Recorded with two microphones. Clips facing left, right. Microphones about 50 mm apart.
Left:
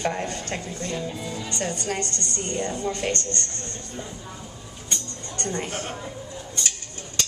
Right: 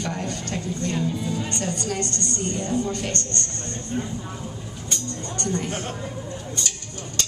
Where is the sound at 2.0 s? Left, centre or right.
Right.